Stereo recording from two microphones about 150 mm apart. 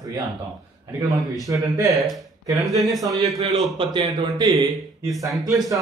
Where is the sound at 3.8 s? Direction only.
30° right (ahead or behind).